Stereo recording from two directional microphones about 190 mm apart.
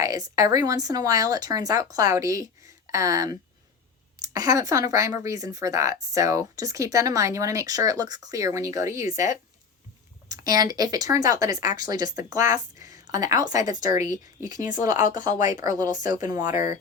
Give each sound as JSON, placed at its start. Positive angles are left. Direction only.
{"t": 0.0, "sound": "speech", "side_deg": -20}
{"t": 10.2, "sound": "speech", "side_deg": -20}
{"t": 12.8, "sound": "a sound", "side_deg": -20}
{"t": 13.5, "sound": "speech", "side_deg": -20}
{"t": 14.9, "sound": "speech", "side_deg": 40}
{"t": 16.1, "sound": "speech", "side_deg": -20}